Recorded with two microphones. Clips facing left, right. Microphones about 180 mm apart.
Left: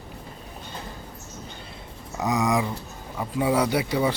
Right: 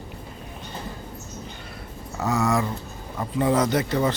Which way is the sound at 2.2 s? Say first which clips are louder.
Even; 15° left (ahead or behind).